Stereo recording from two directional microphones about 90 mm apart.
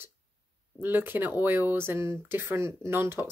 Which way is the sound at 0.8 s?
20° right (ahead or behind).